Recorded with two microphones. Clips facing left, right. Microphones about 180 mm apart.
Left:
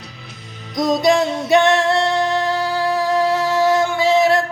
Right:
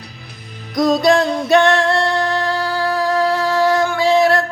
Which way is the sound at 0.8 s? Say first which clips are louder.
Right 2 dB; 20° left (ahead or behind).